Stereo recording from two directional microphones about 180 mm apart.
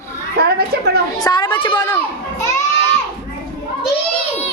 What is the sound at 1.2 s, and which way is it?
Speech, 25° left (ahead or behind).